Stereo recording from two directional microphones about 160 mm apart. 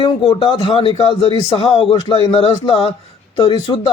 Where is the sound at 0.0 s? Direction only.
30° left (ahead or behind).